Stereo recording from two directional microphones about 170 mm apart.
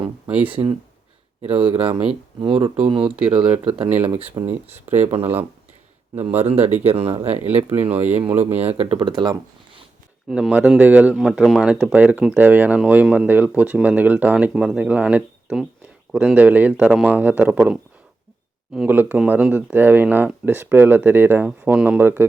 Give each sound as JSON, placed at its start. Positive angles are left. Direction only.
{"t": 0.4, "sound": "speech", "side_deg": -30}
{"t": 3.0, "sound": "speech", "side_deg": -5}
{"t": 4.0, "sound": "speech", "side_deg": -30}
{"t": 4.7, "sound": "speech", "side_deg": -10}
{"t": 6.1, "sound": "speech", "side_deg": -35}
{"t": 7.4, "sound": "speech", "side_deg": -10}
{"t": 8.2, "sound": "speech", "side_deg": -35}
{"t": 10.2, "sound": "speech", "side_deg": -5}